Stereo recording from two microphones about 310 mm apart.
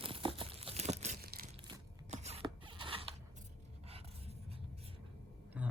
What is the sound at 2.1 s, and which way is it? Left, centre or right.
Zipper, right.